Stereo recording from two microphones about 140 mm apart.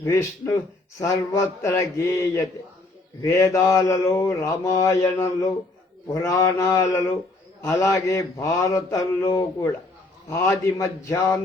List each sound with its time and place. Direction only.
0.0 s mantra: 20° left (ahead or behind)